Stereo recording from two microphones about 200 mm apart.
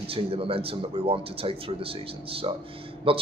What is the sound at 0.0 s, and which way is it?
Speech, 30° right (ahead or behind).